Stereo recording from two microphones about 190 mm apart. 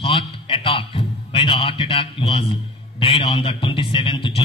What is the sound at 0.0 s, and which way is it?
A man's voice, 25° left (ahead or behind).